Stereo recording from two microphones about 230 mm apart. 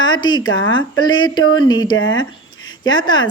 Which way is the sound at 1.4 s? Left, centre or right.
Left.